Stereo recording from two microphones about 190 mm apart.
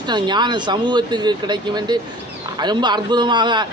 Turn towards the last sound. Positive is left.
turn(degrees=-25)  # may be behind; listen again after turning